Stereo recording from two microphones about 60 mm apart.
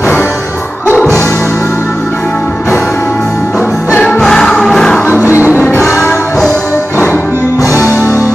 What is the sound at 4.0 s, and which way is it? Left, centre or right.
Music, centre.